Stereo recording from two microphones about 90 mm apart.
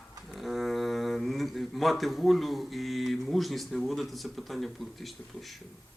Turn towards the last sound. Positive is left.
turn(degrees=0)  # may be behind; listen again after turning